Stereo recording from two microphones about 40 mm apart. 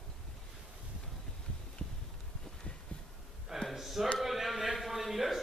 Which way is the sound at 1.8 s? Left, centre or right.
Centre.